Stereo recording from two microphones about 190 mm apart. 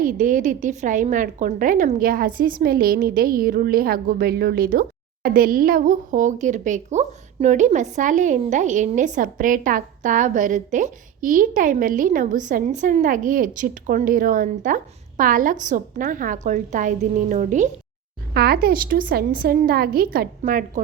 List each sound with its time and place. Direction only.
0.0 s a woman's voice: 45° right (ahead or behind)
18.3 s a woman's voice: 55° right (ahead or behind)